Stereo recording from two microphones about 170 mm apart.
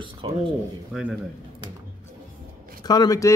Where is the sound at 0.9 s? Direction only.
Centre (ahead or behind).